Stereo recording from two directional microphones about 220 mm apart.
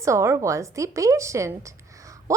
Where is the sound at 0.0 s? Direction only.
15° right (ahead or behind).